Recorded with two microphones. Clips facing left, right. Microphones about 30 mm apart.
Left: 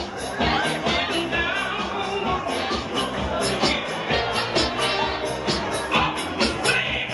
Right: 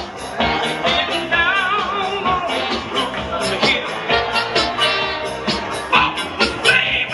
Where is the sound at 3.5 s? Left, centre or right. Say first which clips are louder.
Right 5 dB; right.